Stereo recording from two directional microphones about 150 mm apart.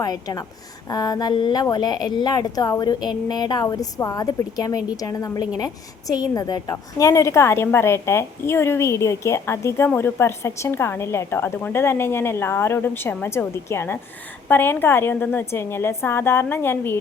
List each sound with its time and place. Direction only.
0.0 s a woman's voice: 25° left (ahead or behind)